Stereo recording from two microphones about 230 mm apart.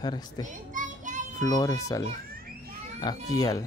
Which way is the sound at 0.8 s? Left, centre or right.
Right.